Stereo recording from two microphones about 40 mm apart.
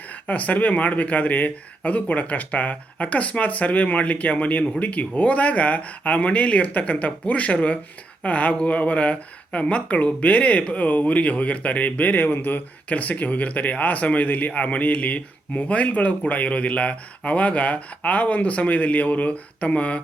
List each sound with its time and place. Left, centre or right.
0.1 s speech: left
12.9 s speech: left